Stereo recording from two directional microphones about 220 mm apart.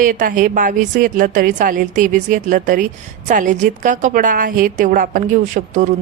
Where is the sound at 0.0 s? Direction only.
40° right (ahead or behind).